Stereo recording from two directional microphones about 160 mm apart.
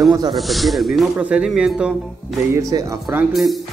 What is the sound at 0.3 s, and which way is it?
Speech, centre (ahead or behind).